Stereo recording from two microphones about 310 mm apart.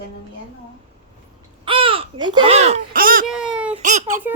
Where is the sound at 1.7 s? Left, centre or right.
Centre.